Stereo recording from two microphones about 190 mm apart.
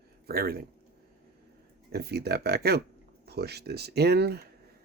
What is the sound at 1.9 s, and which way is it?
Speech, 55° right (ahead or behind).